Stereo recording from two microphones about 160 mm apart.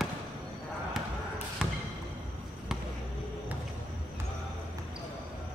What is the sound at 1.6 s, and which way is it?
Basketball bounce, 5° right (ahead or behind).